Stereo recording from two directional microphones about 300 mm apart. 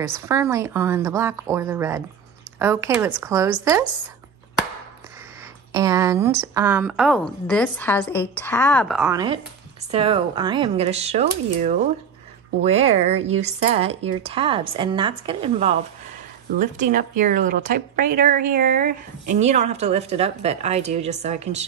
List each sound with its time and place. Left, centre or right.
0.0 s a woman's voice: centre
5.7 s a woman's voice: centre
9.1 s a woman's voice: centre